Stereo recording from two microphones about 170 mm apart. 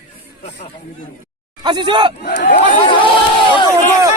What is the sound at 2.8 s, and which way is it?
Speech, 30° left (ahead or behind).